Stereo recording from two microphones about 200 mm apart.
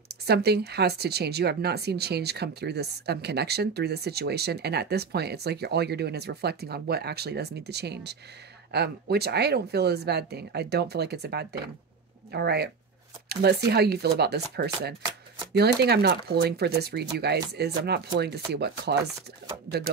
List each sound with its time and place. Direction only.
0.3 s speech: 55° right (ahead or behind)